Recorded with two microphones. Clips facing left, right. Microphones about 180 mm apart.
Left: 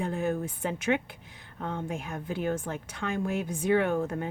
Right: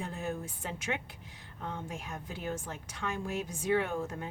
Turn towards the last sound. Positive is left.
turn(degrees=60)  # may be behind; listen again after turning